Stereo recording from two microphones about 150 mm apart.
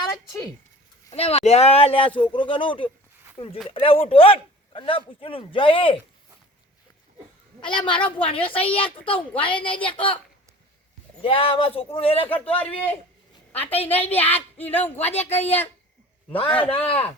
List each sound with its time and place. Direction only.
0.1 s a sound: 25° left (ahead or behind)
1.1 s speech: 40° left (ahead or behind)
7.6 s speech: 35° left (ahead or behind)
11.2 s speech: 35° left (ahead or behind)
12.5 s a woman's voice: 10° left (ahead or behind)
16.8 s speech: 40° left (ahead or behind)